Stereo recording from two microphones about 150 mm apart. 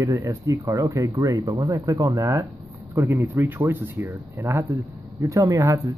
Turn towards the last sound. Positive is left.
turn(degrees=-20)  # may be behind; listen again after turning